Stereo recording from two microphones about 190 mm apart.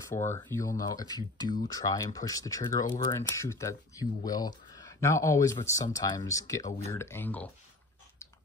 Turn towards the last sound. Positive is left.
turn(degrees=10)  # may be behind; listen again after turning